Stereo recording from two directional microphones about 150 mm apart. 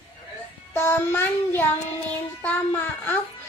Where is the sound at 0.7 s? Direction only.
15° left (ahead or behind).